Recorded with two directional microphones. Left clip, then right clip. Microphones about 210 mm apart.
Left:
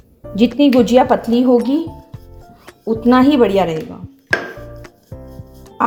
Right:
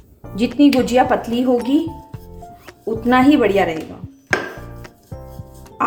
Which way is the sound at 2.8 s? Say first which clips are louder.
Left 2 dB; 25° left (ahead or behind).